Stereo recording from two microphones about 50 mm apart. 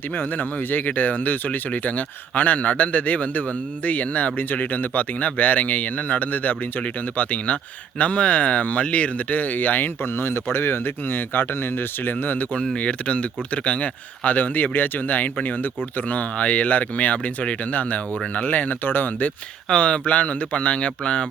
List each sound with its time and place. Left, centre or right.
0.2 s speech: left
12.5 s speech: left
19.6 s speech: left